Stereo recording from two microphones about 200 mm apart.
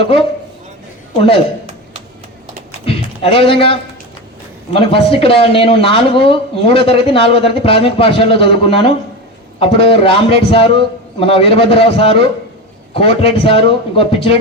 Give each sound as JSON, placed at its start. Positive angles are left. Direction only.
{"t": 0.0, "sound": "speech", "side_deg": 25}
{"t": 2.8, "sound": "a sound", "side_deg": 30}
{"t": 4.7, "sound": "speech", "side_deg": 25}